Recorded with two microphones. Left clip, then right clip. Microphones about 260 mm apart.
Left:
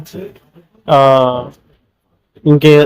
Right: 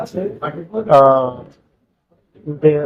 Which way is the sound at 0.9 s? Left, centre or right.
Left.